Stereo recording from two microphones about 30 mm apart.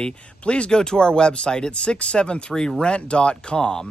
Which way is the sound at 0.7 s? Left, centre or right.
Left.